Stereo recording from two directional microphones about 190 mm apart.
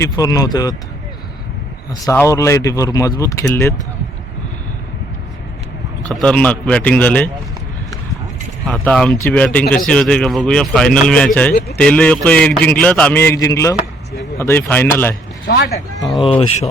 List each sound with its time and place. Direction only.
0.0 s speech: 20° left (ahead or behind)
2.0 s a man's voice: 15° left (ahead or behind)
6.1 s a man's voice: 5° left (ahead or behind)
8.6 s a man's voice: 5° left (ahead or behind)
15.4 s speech: 65° left (ahead or behind)